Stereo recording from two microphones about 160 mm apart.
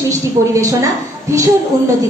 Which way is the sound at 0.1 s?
20° right (ahead or behind).